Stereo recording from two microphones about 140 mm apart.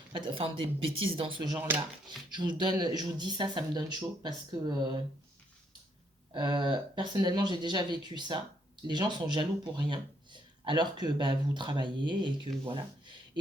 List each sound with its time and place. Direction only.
0.1 s speech: 35° right (ahead or behind)
1.5 s speech: 10° right (ahead or behind)
2.0 s speech: 35° right (ahead or behind)
6.3 s speech: 35° right (ahead or behind)